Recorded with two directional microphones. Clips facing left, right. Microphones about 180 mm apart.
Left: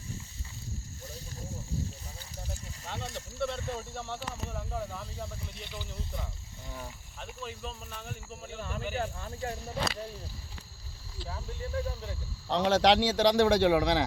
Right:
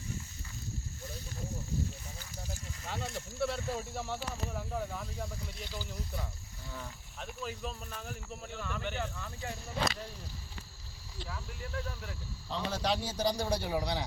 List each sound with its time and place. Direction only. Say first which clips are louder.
2.8 s speech: even; centre (ahead or behind)
7.2 s speech: right 1 dB; centre (ahead or behind)
8.5 s speech: left 3 dB; 35° left (ahead or behind)
11.3 s speech: left 5 dB; 30° left (ahead or behind)
12.5 s a man's voice: left 10 dB; 85° left